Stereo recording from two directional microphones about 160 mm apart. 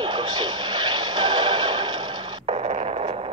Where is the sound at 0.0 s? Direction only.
30° right (ahead or behind).